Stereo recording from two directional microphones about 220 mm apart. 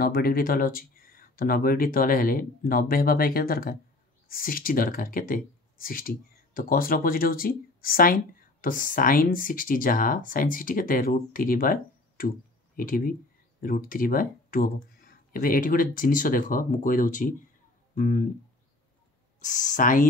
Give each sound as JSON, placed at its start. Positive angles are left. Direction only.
{"t": 0.0, "sound": "speech", "side_deg": 40}
{"t": 19.4, "sound": "speech", "side_deg": 35}